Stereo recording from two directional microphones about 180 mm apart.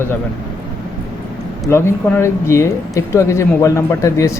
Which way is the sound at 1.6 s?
15° left (ahead or behind).